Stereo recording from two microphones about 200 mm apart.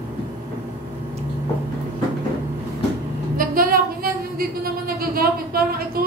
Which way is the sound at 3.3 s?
45° right (ahead or behind).